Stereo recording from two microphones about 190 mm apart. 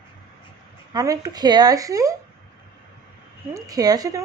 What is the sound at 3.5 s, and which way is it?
Speech, 20° right (ahead or behind).